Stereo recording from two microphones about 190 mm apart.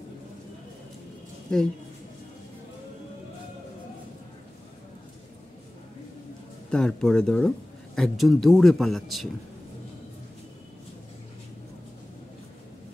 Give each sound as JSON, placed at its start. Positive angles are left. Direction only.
{"t": 1.5, "sound": "speech", "side_deg": 5}
{"t": 6.7, "sound": "speech", "side_deg": 5}